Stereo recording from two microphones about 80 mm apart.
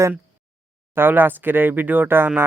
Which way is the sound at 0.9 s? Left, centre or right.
Right.